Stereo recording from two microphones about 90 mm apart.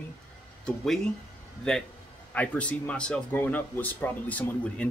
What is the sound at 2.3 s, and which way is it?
Speech, 15° left (ahead or behind).